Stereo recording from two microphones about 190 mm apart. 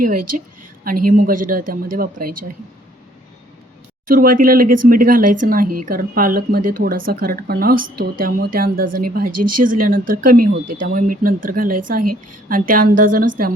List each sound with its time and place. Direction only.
0.0 s speech: 50° right (ahead or behind)
4.0 s speech: 45° right (ahead or behind)